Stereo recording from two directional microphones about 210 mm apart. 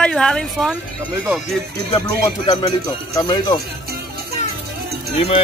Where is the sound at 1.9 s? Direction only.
20° left (ahead or behind).